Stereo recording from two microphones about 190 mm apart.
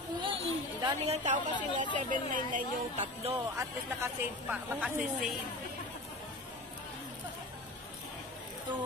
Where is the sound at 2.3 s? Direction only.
40° right (ahead or behind).